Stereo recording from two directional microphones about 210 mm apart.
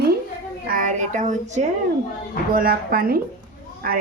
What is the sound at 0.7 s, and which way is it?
A woman's voice, 40° right (ahead or behind).